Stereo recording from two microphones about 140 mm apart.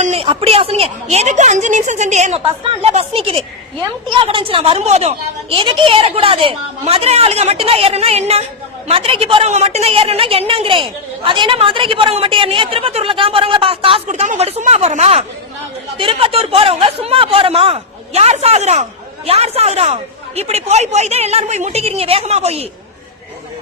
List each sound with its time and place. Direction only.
0.0 s a sound: 50° right (ahead or behind)
0.3 s a woman's voice: 45° right (ahead or behind)
2.4 s a woman's voice: 45° right (ahead or behind)
14.1 s speech: 55° right (ahead or behind)
16.0 s speech: 40° right (ahead or behind)